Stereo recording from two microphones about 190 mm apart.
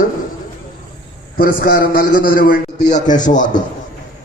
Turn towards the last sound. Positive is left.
turn(degrees=40)  # may be behind; listen again after turning